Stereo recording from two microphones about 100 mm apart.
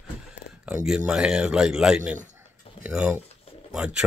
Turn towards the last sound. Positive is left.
turn(degrees=-10)  # may be behind; listen again after turning